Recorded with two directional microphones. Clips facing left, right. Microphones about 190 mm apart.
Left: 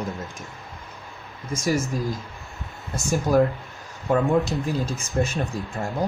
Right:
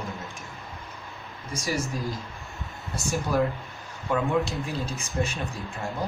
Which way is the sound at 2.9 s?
45° left (ahead or behind).